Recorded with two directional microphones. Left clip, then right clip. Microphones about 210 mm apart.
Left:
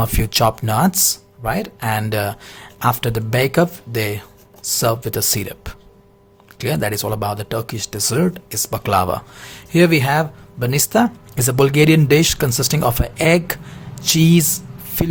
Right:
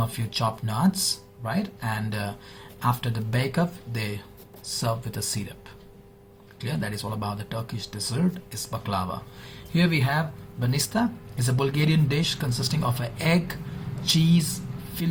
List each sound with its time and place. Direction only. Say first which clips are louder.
0.0 s speech: left 11 dB; 50° left (ahead or behind)
6.6 s speech: left 12 dB; 50° left (ahead or behind)